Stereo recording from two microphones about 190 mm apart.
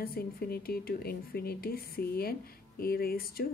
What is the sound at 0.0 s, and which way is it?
Speech, 50° left (ahead or behind).